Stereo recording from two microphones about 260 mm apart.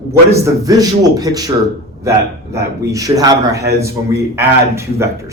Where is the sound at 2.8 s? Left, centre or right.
Centre.